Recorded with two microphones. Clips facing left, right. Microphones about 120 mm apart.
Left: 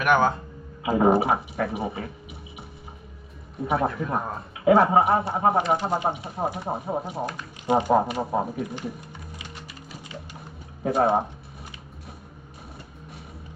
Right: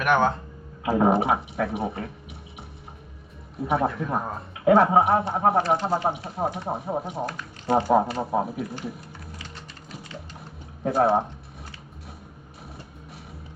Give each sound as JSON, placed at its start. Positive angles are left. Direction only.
{"t": 0.0, "sound": "a man's voice", "side_deg": 0}
{"t": 3.6, "sound": "a man's voice", "side_deg": 0}
{"t": 7.3, "sound": "speech", "side_deg": 15}
{"t": 8.2, "sound": "a man's voice", "side_deg": 0}
{"t": 11.0, "sound": "a man's voice", "side_deg": 0}